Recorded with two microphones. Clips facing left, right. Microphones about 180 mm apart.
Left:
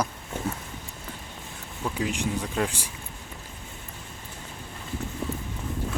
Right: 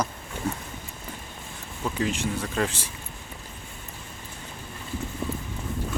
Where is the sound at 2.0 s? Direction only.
15° left (ahead or behind).